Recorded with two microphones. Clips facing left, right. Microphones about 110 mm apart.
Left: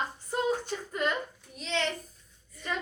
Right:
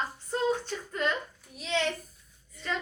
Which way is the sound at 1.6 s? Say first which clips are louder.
Right 2 dB; 5° right (ahead or behind).